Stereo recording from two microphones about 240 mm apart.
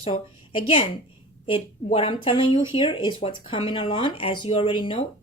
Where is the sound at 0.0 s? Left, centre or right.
Left.